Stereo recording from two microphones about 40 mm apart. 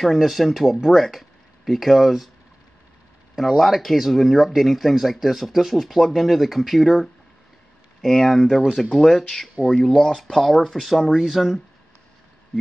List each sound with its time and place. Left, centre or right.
0.0 s speech: centre
3.3 s speech: centre
9.7 s speech: centre
10.1 s speech: centre